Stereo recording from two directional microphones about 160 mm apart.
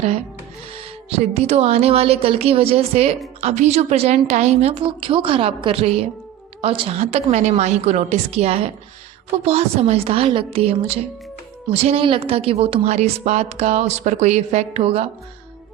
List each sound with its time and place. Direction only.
1.1 s a woman's voice: 40° right (ahead or behind)